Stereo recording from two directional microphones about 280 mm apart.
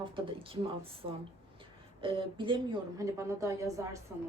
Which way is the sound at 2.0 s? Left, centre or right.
Centre.